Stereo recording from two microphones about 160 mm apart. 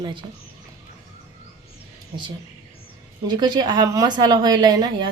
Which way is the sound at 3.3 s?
25° right (ahead or behind).